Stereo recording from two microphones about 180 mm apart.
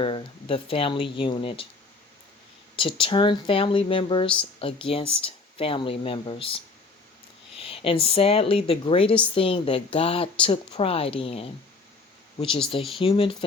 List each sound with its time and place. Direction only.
0.0 s speech: 30° left (ahead or behind)
2.7 s speech: 30° left (ahead or behind)
13.0 s speech: 30° left (ahead or behind)